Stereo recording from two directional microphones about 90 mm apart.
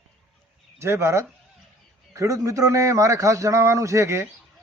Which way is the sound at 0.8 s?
30° right (ahead or behind).